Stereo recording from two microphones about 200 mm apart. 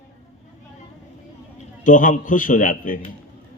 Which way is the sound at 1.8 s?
40° left (ahead or behind).